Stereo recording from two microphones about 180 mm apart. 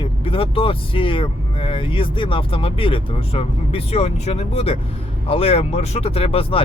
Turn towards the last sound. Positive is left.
turn(degrees=30)  # may be behind; listen again after turning